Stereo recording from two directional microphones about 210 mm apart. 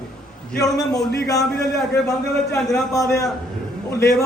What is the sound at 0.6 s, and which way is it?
A man's voice, 15° left (ahead or behind).